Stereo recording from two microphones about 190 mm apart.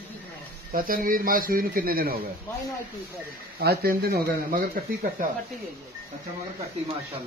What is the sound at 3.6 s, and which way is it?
Speech, 55° right (ahead or behind).